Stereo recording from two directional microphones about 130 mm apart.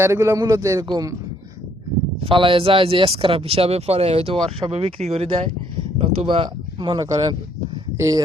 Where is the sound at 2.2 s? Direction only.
40° right (ahead or behind).